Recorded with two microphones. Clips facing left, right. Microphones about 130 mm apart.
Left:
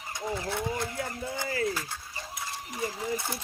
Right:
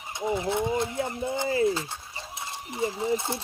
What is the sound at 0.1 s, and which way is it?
Speech, 20° right (ahead or behind).